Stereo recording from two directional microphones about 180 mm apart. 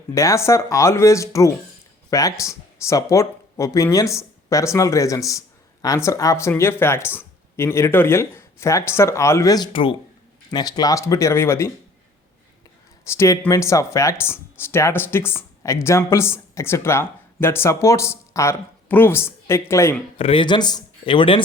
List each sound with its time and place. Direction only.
0.1 s speech: 15° left (ahead or behind)
13.1 s speech: 15° left (ahead or behind)
20.1 s speech: 30° left (ahead or behind)